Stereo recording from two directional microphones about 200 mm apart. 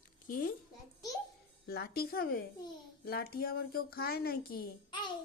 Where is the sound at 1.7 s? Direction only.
50° left (ahead or behind).